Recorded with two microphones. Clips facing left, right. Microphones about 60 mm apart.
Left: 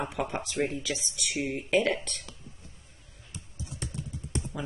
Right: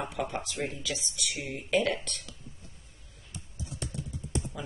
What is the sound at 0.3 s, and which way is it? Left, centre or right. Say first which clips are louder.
Speech: left 4 dB; left.